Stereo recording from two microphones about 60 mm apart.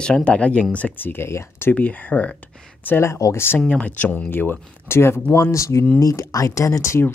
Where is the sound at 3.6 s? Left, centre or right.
Centre; by 5.2 s left.